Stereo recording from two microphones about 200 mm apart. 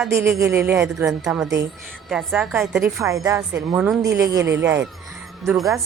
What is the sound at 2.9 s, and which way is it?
A woman's voice, 15° right (ahead or behind).